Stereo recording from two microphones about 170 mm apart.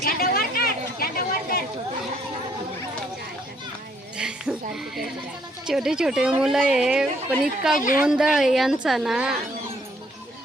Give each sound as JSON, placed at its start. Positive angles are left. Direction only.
{"t": 0.0, "sound": "chatter", "side_deg": 60}
{"t": 4.2, "sound": "music", "side_deg": -5}
{"t": 5.6, "sound": "speech", "side_deg": -5}
{"t": 7.8, "sound": "a woman's voice", "side_deg": 50}
{"t": 8.0, "sound": "speech", "side_deg": -5}